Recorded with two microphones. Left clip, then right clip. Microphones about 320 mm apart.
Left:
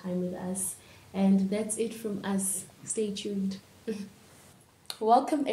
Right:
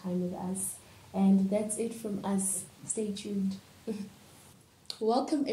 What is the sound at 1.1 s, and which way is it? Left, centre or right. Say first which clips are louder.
A woman's voice: even; centre.